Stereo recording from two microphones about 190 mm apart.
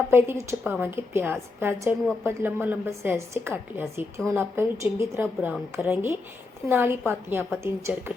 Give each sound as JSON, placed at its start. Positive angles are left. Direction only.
{"t": 0.1, "sound": "a woman's voice", "side_deg": -15}